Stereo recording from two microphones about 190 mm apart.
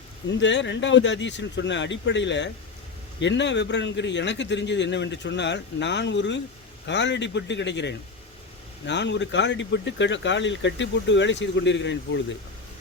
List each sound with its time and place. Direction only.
0.3 s speech: 70° left (ahead or behind)